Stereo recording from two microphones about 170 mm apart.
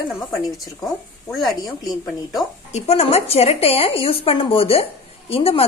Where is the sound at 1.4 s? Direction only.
25° left (ahead or behind).